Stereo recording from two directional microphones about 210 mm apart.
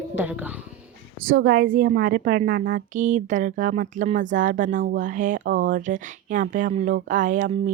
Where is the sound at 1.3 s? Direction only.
65° right (ahead or behind).